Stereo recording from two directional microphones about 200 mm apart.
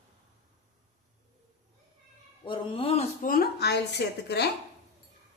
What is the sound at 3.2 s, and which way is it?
A woman's voice, 45° left (ahead or behind).